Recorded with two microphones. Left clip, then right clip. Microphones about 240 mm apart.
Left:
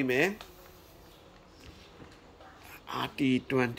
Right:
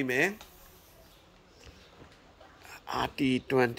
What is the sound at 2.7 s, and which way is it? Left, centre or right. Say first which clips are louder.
Speech: right 3 dB; centre.